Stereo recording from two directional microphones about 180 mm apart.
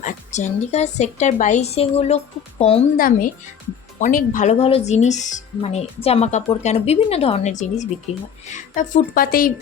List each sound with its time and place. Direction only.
0.0 s a woman's voice: 40° left (ahead or behind)
3.0 s speech: 50° left (ahead or behind)
4.6 s a woman's voice: 35° left (ahead or behind); by 9.5 s 55° left (ahead or behind)